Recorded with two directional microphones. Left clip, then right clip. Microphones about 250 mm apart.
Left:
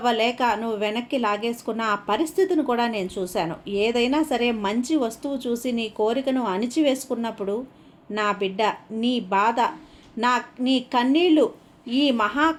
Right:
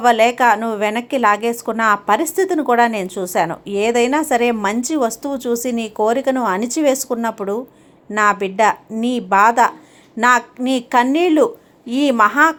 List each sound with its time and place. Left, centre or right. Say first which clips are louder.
0.0 s a woman's voice: right 9 dB; right